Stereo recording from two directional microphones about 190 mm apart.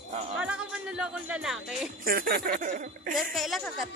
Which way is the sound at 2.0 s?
50° right (ahead or behind).